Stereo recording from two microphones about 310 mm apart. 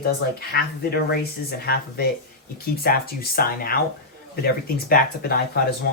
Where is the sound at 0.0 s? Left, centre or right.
Left.